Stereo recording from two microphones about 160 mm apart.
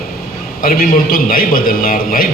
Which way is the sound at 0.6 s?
60° left (ahead or behind).